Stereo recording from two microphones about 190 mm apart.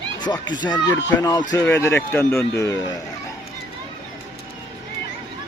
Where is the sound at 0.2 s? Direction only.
20° left (ahead or behind).